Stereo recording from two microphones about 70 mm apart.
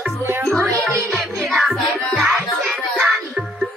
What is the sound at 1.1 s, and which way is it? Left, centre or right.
Music, centre.